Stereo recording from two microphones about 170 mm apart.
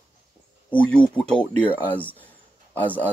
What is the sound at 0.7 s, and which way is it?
Speech, 5° left (ahead or behind).